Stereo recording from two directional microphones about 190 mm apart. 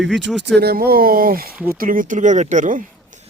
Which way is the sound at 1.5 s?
10° right (ahead or behind).